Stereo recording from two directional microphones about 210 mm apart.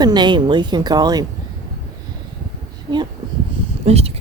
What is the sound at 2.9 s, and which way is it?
Speech, 25° right (ahead or behind).